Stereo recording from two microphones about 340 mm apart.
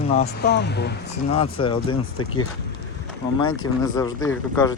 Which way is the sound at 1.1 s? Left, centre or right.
Centre.